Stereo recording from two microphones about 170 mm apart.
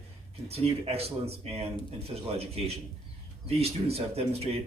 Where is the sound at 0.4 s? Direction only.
35° right (ahead or behind).